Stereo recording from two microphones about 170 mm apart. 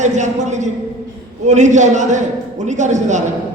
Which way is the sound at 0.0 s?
45° right (ahead or behind).